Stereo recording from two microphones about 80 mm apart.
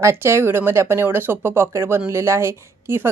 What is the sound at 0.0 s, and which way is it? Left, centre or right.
A woman's voice, right.